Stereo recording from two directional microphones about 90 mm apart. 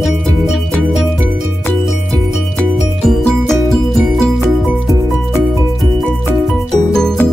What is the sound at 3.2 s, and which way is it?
Music, 5° left (ahead or behind).